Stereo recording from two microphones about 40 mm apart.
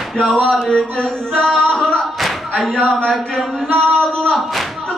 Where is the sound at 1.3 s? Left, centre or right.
Left.